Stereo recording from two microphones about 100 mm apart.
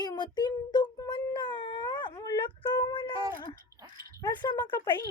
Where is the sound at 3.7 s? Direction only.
30° right (ahead or behind).